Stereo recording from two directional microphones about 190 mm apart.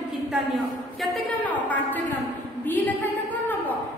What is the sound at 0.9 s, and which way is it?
A woman's voice, centre (ahead or behind).